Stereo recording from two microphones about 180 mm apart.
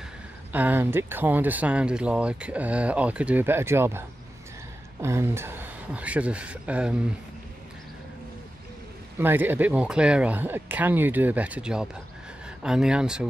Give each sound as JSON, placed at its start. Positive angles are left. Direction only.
{"t": 0.5, "sound": "speech", "side_deg": -10}
{"t": 5.0, "sound": "speech", "side_deg": -15}
{"t": 9.2, "sound": "speech", "side_deg": -10}